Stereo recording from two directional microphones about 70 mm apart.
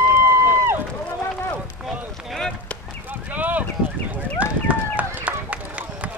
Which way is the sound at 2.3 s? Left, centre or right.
Centre.